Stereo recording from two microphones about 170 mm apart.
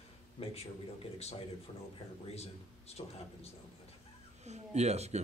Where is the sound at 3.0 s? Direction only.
30° left (ahead or behind).